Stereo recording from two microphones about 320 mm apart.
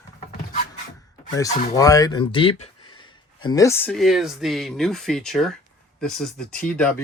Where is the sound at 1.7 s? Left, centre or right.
Centre.